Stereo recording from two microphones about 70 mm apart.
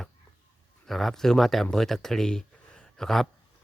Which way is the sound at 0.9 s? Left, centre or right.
Centre.